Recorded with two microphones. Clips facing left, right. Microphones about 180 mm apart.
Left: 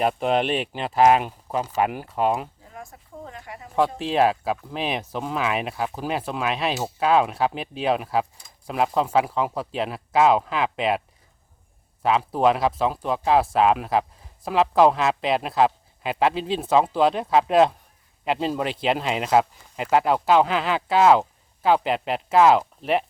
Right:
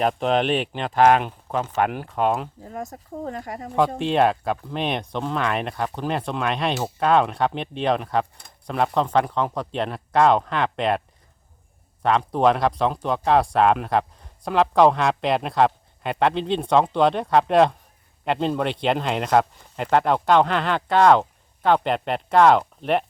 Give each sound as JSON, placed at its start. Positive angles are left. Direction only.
{"t": 0.0, "sound": "speech", "side_deg": 5}
{"t": 2.6, "sound": "speech", "side_deg": -40}
{"t": 3.8, "sound": "speech", "side_deg": 0}
{"t": 12.0, "sound": "speech", "side_deg": 5}